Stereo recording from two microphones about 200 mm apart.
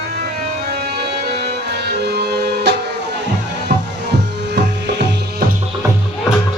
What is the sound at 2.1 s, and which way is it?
Music, 55° right (ahead or behind).